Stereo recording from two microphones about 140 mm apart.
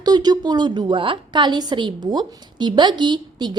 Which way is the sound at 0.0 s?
30° right (ahead or behind).